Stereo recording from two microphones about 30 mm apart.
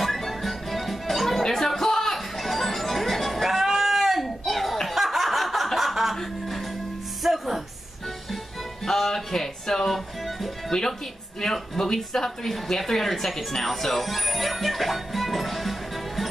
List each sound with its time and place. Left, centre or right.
0.0 s music: centre
2.4 s music: centre
4.8 s a sound: centre
5.8 s music: centre
7.2 s music: centre
8.8 s music: centre
10.7 s a woman's voice: left; by 15.7 s centre